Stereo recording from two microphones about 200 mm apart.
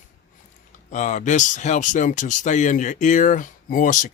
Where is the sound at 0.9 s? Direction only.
40° left (ahead or behind).